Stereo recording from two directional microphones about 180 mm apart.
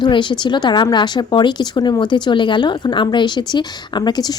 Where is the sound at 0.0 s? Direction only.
25° left (ahead or behind).